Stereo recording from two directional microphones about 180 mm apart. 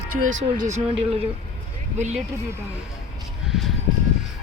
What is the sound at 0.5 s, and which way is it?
Speech, 45° right (ahead or behind).